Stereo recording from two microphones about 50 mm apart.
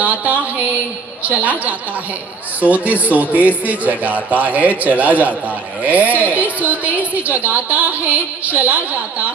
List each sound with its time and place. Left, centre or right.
0.0 s speech: right